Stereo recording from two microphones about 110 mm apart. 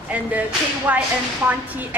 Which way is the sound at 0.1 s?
15° right (ahead or behind).